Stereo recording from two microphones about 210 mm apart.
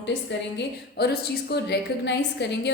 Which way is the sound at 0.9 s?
50° left (ahead or behind).